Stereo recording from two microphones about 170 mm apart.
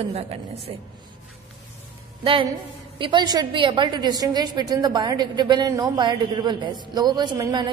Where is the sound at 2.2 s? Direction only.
30° right (ahead or behind).